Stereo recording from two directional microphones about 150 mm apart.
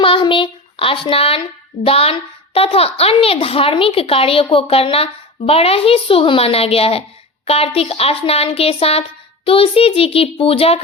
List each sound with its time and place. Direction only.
0.0 s child singing: 35° left (ahead or behind)
1.8 s speech: 40° left (ahead or behind)